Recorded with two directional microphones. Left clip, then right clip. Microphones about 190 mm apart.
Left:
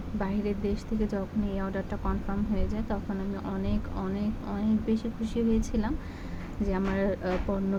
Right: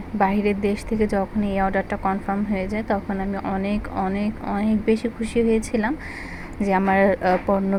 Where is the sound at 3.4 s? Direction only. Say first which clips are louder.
Right 9 dB; 10° right (ahead or behind).